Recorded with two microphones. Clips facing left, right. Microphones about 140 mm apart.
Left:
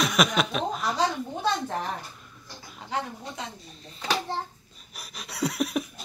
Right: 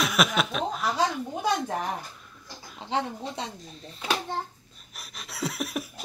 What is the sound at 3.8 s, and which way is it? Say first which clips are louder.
Speech: even; 10° right (ahead or behind).